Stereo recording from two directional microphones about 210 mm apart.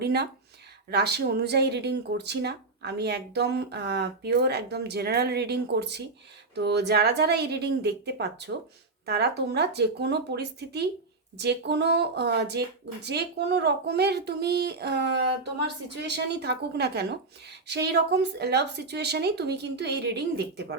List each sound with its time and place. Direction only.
0.9 s speech: 50° right (ahead or behind)